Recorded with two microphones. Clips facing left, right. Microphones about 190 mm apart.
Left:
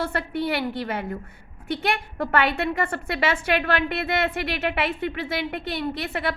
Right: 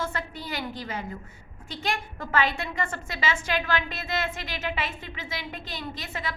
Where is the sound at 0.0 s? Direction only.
60° left (ahead or behind).